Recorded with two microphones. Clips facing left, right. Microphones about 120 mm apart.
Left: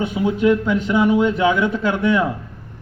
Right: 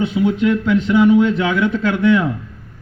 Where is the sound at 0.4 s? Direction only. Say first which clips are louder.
Right 1 dB; 15° left (ahead or behind).